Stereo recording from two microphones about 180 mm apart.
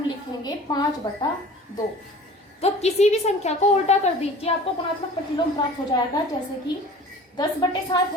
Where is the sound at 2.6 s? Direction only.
35° left (ahead or behind).